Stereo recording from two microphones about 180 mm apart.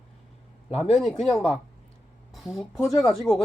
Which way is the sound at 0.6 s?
30° left (ahead or behind).